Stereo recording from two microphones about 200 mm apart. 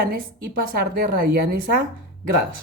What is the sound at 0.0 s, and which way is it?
A woman's voice, 50° right (ahead or behind).